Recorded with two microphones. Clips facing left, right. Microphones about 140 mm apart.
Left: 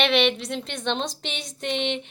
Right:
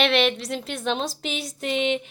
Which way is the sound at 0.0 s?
Centre (ahead or behind).